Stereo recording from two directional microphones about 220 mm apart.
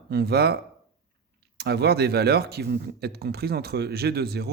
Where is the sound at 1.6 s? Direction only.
45° right (ahead or behind).